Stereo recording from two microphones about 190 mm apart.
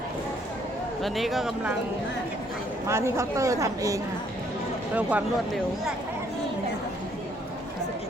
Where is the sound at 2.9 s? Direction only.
15° right (ahead or behind).